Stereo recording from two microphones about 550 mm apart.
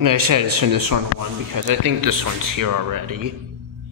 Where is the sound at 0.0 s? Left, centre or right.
Right.